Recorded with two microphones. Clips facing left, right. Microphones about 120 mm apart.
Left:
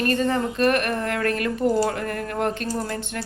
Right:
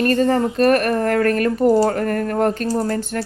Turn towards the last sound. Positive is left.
turn(degrees=-40)  # may be behind; listen again after turning